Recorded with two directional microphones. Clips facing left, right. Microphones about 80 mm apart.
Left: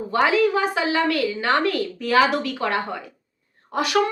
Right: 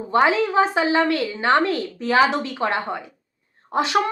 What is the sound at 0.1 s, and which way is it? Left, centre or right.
Speech, right.